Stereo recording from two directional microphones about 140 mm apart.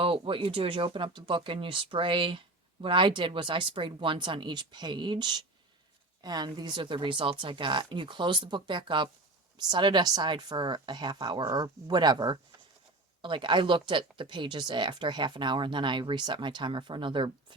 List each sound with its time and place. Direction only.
0.0 s speech: 40° right (ahead or behind)